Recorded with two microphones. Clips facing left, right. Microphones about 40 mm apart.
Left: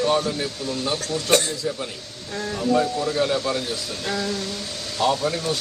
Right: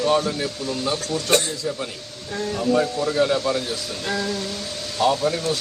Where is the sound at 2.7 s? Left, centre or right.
Centre.